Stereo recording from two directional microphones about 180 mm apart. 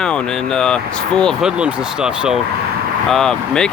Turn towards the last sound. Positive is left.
turn(degrees=5)  # may be behind; listen again after turning